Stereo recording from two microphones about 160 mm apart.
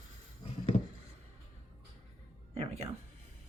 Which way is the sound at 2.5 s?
40° right (ahead or behind).